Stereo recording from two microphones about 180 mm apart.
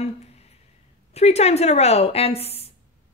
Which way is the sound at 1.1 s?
35° left (ahead or behind).